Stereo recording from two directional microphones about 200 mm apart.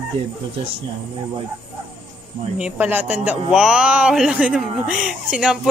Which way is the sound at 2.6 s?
10° right (ahead or behind).